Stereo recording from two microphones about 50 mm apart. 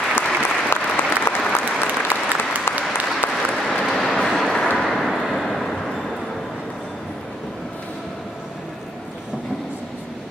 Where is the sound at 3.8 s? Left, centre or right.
Centre.